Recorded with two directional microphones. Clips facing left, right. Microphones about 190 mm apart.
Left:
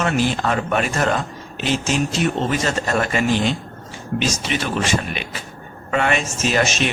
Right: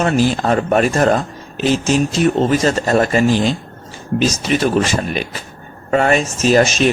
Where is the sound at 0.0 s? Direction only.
40° right (ahead or behind).